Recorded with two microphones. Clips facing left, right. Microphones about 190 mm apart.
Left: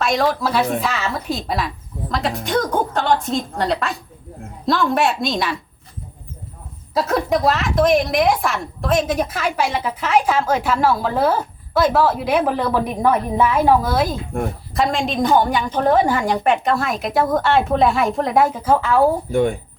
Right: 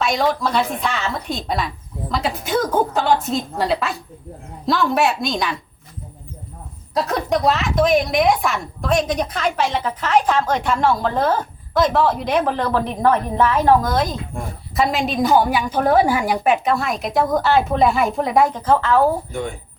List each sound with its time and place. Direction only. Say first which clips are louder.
0.0 s a woman's voice: left 1 dB; centre (ahead or behind)
6.9 s a woman's voice: left 1 dB; centre (ahead or behind)
19.3 s speech: left 9 dB; 55° left (ahead or behind)